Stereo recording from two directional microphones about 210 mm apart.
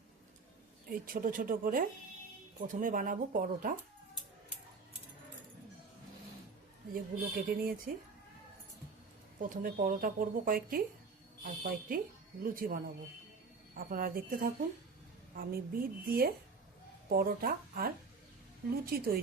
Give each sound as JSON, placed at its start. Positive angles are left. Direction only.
{"t": 0.9, "sound": "speech", "side_deg": -40}
{"t": 6.9, "sound": "speech", "side_deg": -45}
{"t": 9.4, "sound": "speech", "side_deg": -40}
{"t": 11.9, "sound": "speech", "side_deg": -40}